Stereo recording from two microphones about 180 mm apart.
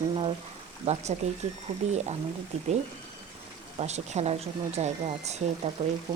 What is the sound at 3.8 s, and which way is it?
Speech, 40° right (ahead or behind).